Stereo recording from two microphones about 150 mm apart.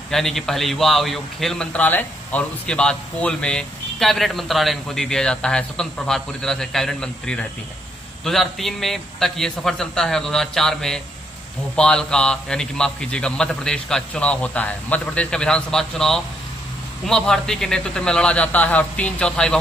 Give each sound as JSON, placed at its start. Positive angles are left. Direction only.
{"t": 0.1, "sound": "a man's voice", "side_deg": 0}